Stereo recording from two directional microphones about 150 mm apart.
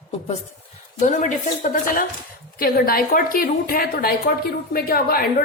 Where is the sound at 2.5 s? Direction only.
80° left.